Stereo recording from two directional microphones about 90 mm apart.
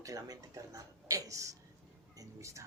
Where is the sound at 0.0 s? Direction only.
40° right (ahead or behind).